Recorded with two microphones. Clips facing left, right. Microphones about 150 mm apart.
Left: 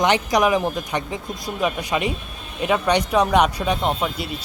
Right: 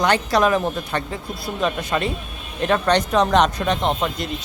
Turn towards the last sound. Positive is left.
turn(degrees=5)  # may be behind; listen again after turning